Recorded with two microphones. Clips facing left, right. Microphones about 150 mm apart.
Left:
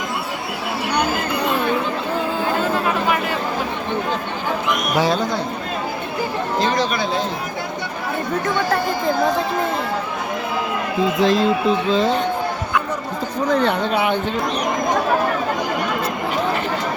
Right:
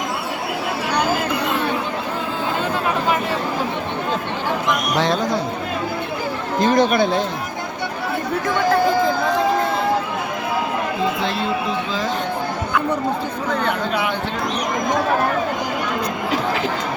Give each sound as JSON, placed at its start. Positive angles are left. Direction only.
{"t": 4.9, "sound": "speech", "side_deg": 5}
{"t": 6.6, "sound": "speech", "side_deg": -50}
{"t": 13.5, "sound": "speech", "side_deg": 30}